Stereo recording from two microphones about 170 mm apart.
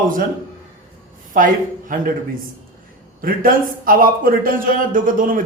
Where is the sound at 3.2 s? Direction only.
55° right (ahead or behind).